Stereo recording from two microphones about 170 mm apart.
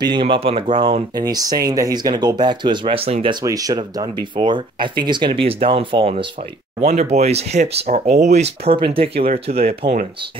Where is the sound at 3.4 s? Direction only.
20° right (ahead or behind).